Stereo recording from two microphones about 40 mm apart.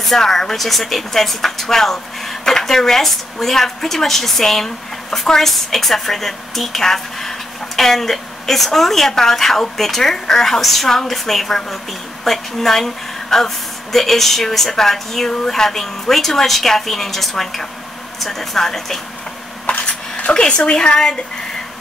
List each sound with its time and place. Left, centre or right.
0.0 s speech: centre
19.6 s a sound: left
20.3 s a woman's voice: left